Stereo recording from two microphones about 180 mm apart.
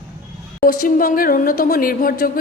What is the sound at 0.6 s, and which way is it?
Speech, 50° left (ahead or behind).